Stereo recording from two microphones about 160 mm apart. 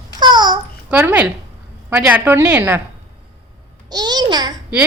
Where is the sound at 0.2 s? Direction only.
30° right (ahead or behind).